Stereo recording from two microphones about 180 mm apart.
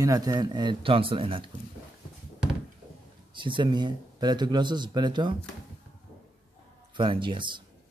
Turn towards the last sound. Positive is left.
turn(degrees=-25)  # may be behind; listen again after turning